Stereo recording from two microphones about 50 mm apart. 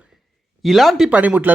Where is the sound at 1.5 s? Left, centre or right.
Right.